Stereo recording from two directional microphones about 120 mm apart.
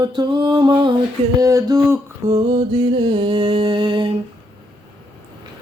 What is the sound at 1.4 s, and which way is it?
Speech, 25° right (ahead or behind).